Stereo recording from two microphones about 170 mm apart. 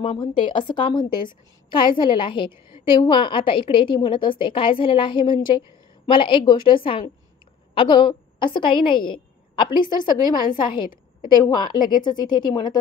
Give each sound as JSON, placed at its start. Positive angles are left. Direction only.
{"t": 0.0, "sound": "a woman's voice", "side_deg": 30}